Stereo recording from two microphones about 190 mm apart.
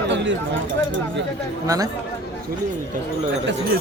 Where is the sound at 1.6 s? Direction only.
20° right (ahead or behind).